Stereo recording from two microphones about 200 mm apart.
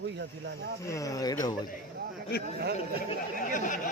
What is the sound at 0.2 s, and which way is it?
Speech, 55° right (ahead or behind).